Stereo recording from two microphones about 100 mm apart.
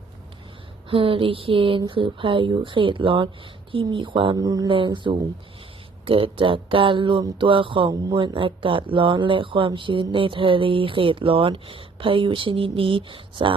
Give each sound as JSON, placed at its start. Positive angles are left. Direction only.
{"t": 0.9, "sound": "speech", "side_deg": -65}
{"t": 4.4, "sound": "speech", "side_deg": -40}
{"t": 4.9, "sound": "speech", "side_deg": -50}
{"t": 6.1, "sound": "speech", "side_deg": -65}